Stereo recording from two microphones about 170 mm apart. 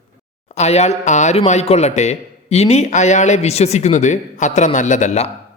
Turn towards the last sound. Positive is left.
turn(degrees=40)  # may be behind; listen again after turning